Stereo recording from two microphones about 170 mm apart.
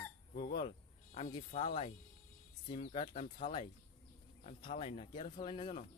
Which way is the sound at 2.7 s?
30° left (ahead or behind).